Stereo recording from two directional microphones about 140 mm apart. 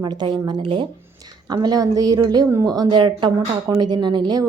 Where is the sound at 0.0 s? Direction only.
30° right (ahead or behind).